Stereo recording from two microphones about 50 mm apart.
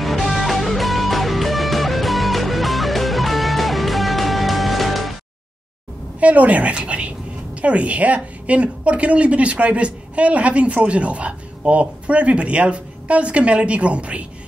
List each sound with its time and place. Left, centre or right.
0.0 s music: centre
6.1 s a woman's voice: right